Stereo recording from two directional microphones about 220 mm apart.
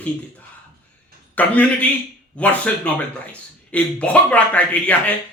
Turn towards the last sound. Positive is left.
turn(degrees=5)  # may be behind; listen again after turning